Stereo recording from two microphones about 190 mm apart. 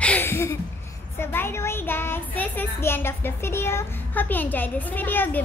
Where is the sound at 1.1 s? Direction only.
15° left (ahead or behind).